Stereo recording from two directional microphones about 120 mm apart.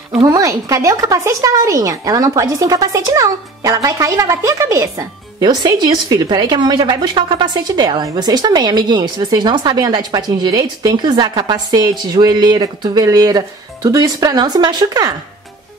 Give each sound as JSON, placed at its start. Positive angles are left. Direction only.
{"t": 0.3, "sound": "a woman's voice", "side_deg": -30}